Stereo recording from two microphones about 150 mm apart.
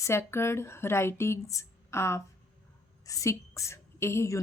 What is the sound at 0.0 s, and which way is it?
Speech, 15° left (ahead or behind).